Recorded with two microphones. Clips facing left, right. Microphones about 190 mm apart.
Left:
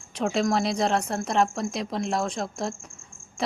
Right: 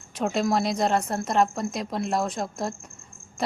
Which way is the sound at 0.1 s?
Centre (ahead or behind).